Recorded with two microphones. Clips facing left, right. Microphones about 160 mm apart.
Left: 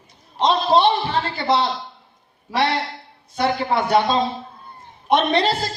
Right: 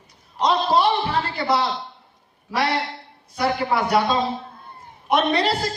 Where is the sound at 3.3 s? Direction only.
25° left (ahead or behind).